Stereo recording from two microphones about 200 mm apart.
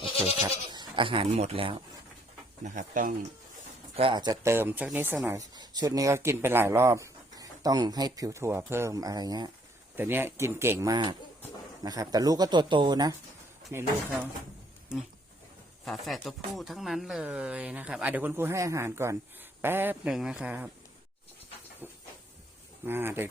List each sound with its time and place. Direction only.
0.4 s speech: 20° right (ahead or behind)
2.6 s speech: 40° right (ahead or behind)
3.9 s speech: 25° right (ahead or behind)
14.9 s speech: 5° right (ahead or behind)
21.8 s hiss: 10° right (ahead or behind)
22.9 s speech: 10° right (ahead or behind)